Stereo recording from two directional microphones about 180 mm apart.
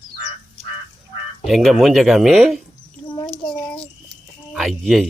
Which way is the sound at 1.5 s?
Centre (ahead or behind).